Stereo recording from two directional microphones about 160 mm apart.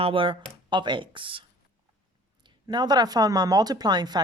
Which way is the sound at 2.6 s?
25° right (ahead or behind).